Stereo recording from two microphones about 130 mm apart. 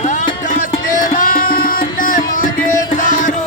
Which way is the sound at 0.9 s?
90° left.